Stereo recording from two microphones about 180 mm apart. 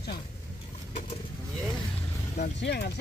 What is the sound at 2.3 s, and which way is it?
Speech, 65° left (ahead or behind).